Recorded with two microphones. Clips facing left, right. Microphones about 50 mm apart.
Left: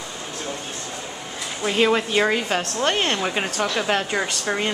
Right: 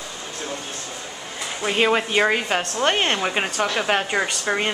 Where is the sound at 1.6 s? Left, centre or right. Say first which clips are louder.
Even; centre.